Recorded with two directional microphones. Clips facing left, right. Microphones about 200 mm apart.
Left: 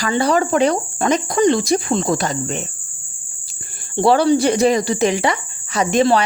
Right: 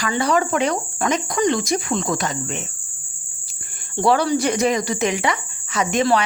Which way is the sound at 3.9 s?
30° left (ahead or behind).